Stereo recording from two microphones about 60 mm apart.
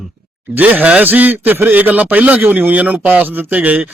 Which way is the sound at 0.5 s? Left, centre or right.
Right.